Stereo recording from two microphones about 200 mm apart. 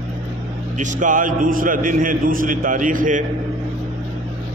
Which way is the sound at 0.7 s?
40° right (ahead or behind).